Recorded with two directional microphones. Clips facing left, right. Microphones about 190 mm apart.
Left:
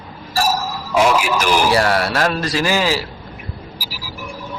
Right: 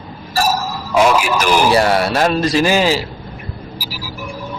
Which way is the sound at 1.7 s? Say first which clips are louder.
Right 3 dB; 20° right (ahead or behind).